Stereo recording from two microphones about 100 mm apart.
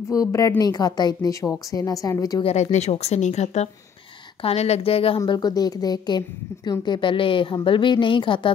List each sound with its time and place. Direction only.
0.1 s a woman's voice: 35° left (ahead or behind)
2.4 s speech: 90° left; by 5.2 s 70° left (ahead or behind)
5.3 s a woman's voice: 40° left (ahead or behind)